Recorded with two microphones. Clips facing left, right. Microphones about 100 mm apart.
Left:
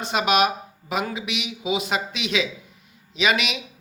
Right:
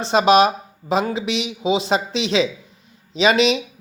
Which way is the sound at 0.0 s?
30° right (ahead or behind).